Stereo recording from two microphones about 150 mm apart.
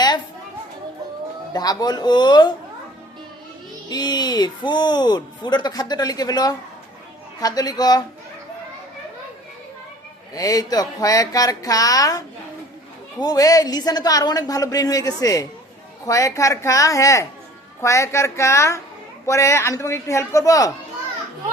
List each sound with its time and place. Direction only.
1.5 s speech: 25° left (ahead or behind)
3.8 s speech: 25° left (ahead or behind)
10.3 s speech: 25° left (ahead or behind)